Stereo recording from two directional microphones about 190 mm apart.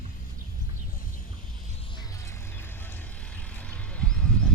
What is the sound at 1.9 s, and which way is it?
Vehicle, 15° left (ahead or behind).